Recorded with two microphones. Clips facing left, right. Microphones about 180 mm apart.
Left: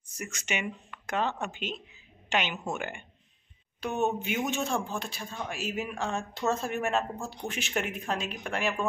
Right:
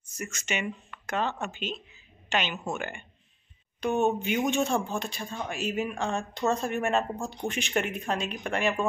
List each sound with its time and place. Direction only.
0.2 s speech: 15° left (ahead or behind)